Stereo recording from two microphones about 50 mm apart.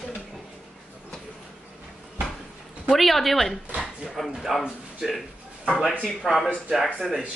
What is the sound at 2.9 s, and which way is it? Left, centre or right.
A woman's voice, centre.